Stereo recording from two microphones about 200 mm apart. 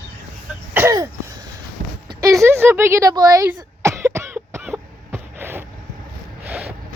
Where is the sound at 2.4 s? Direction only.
10° right (ahead or behind).